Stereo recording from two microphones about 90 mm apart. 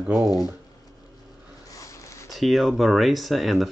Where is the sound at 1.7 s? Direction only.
35° left (ahead or behind).